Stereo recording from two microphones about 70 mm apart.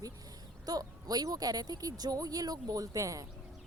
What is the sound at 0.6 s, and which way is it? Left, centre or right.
Speech, right.